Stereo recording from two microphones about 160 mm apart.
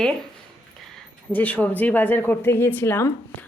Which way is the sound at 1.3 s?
10° left (ahead or behind).